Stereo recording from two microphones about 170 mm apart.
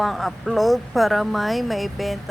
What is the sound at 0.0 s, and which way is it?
A woman's voice, centre (ahead or behind).